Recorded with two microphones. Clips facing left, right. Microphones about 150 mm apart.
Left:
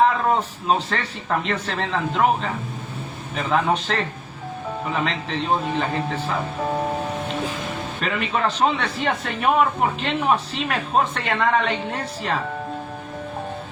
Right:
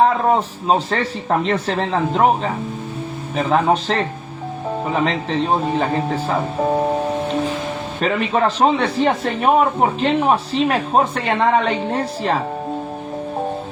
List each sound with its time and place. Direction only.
0.0 s speech: 35° right (ahead or behind)
8.0 s speech: 35° right (ahead or behind)